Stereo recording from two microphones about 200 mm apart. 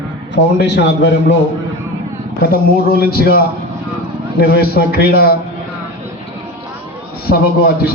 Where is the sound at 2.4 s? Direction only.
50° left (ahead or behind).